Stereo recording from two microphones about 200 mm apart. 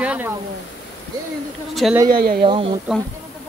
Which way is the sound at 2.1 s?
50° right (ahead or behind).